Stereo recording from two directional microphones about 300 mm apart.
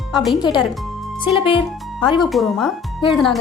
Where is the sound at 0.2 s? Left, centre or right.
Centre.